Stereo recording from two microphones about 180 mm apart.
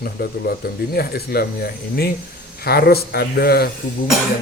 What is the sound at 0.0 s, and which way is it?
Speech, 60° left (ahead or behind).